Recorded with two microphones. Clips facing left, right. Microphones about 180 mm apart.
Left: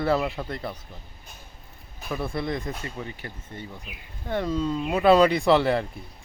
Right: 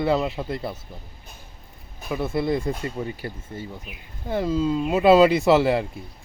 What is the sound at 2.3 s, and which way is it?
Speech, 25° right (ahead or behind).